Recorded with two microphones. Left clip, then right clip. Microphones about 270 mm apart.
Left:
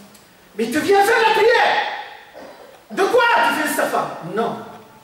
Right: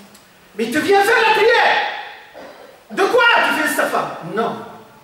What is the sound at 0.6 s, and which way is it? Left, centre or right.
A woman's voice, centre.